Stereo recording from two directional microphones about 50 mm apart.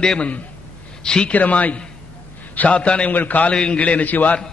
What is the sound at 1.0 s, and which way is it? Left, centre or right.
Speech, centre.